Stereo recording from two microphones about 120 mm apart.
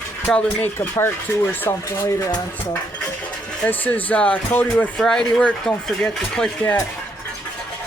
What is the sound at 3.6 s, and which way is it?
Speech, 15° left (ahead or behind).